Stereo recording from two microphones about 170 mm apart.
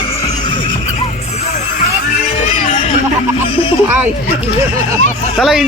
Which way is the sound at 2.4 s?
35° left (ahead or behind).